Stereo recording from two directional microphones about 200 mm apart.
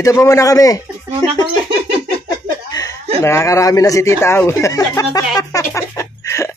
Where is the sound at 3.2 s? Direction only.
15° left (ahead or behind).